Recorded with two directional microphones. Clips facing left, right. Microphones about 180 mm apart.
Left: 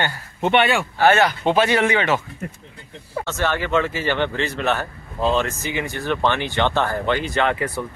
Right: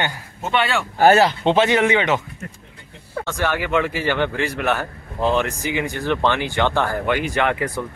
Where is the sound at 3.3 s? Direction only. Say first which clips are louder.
Even; 10° right (ahead or behind).